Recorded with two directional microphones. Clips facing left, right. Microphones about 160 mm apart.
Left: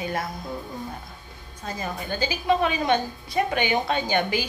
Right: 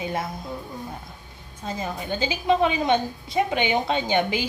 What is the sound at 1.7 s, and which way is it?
A woman's voice, 20° right (ahead or behind).